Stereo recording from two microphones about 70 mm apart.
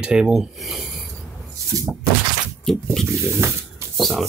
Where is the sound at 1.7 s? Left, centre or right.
Right.